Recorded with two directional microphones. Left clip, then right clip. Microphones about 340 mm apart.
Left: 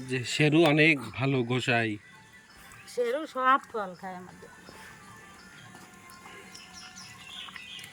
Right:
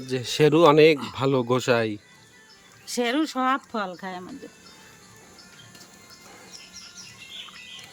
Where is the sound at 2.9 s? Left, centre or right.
Right.